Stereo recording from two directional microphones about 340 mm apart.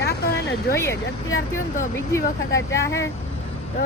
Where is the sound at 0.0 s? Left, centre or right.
Left.